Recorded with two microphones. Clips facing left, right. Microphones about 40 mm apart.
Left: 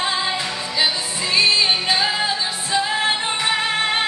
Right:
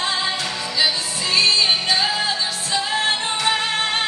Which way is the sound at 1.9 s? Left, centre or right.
Centre.